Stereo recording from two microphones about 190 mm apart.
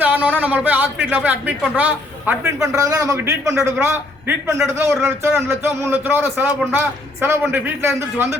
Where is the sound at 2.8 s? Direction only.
15° right (ahead or behind).